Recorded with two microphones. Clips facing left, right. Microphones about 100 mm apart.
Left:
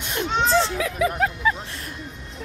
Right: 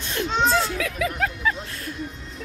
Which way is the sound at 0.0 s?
20° left (ahead or behind).